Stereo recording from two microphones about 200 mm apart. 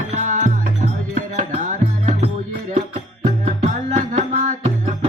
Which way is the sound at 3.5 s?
40° right (ahead or behind).